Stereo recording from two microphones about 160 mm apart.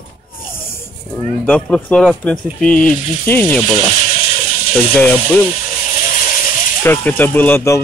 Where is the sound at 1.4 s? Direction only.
10° left (ahead or behind).